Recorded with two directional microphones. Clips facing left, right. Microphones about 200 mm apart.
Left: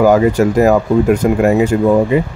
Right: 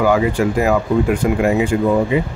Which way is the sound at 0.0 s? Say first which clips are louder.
Left 5 dB; 40° left (ahead or behind).